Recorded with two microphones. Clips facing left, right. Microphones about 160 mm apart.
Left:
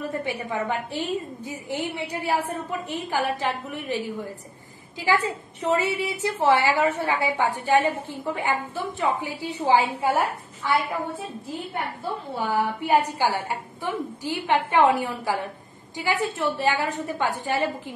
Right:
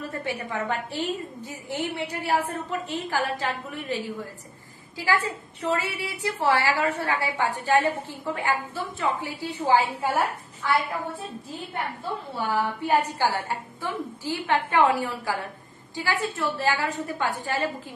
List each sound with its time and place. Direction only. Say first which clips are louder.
0.0 s a woman's voice: left 2 dB; 15° left (ahead or behind)
12.8 s a woman's voice: left 2 dB; 15° left (ahead or behind)